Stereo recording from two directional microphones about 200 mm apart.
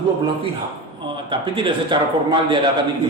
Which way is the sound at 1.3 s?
25° right (ahead or behind).